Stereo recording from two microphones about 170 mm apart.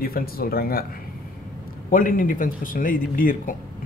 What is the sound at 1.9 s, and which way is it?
Speech, 55° left (ahead or behind).